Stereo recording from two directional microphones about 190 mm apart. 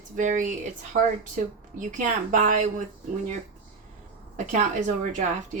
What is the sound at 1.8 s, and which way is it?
Speech, 40° right (ahead or behind).